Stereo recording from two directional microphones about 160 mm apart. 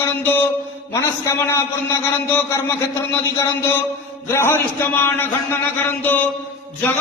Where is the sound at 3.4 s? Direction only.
15° left (ahead or behind).